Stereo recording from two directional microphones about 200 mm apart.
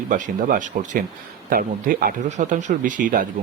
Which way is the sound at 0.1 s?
40° right (ahead or behind).